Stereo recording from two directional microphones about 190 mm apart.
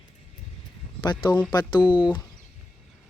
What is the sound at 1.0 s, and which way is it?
Speech, 25° left (ahead or behind).